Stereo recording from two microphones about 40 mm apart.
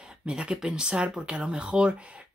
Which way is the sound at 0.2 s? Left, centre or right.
Right.